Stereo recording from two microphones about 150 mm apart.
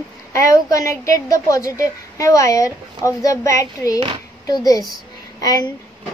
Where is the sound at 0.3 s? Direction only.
20° left (ahead or behind).